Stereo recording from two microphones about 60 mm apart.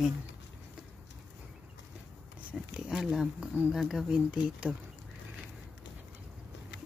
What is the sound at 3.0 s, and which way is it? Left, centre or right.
Speech, centre.